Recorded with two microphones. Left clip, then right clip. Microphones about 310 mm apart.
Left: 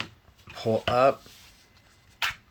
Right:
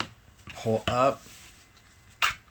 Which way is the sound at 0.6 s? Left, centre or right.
Centre.